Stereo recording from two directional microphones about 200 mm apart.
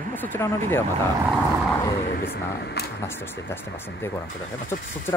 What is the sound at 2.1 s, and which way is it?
Speech, 50° left (ahead or behind).